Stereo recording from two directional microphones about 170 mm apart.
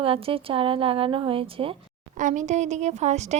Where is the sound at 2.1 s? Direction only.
50° right (ahead or behind).